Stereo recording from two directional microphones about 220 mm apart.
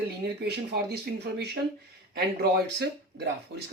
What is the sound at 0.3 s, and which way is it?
Speech, 45° right (ahead or behind).